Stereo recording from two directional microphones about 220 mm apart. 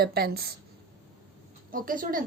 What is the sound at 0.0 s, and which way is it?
Speech, 45° right (ahead or behind).